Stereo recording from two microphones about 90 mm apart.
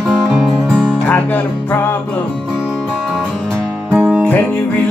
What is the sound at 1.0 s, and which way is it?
Speech, 20° left (ahead or behind).